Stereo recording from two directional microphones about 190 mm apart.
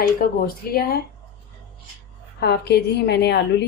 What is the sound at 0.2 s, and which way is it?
Speech, 50° left (ahead or behind).